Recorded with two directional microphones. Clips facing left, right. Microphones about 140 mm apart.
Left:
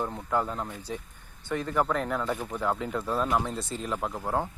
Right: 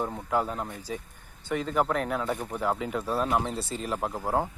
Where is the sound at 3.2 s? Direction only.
25° right (ahead or behind).